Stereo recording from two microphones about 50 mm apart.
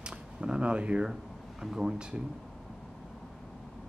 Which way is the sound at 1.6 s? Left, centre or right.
Centre.